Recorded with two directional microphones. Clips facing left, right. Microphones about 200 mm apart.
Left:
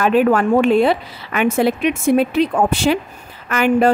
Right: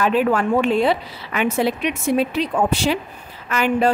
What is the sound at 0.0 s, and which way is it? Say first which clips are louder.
Speech: left 4 dB; 55° left (ahead or behind).